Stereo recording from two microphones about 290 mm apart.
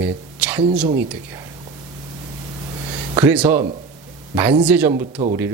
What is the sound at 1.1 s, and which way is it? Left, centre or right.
Speech, centre.